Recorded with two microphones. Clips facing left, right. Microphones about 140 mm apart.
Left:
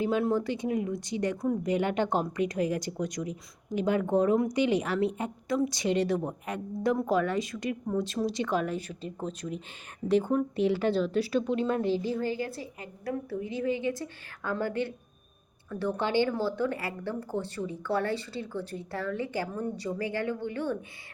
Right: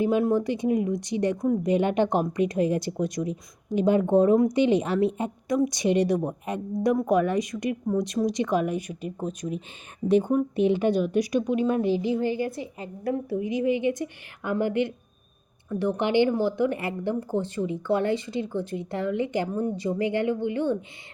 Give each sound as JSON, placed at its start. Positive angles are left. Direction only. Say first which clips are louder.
{"t": 0.0, "sound": "speech", "louder": "right 4 dB", "side_deg": -15}